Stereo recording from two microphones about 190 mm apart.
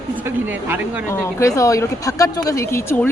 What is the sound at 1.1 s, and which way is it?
Speech, 15° left (ahead or behind).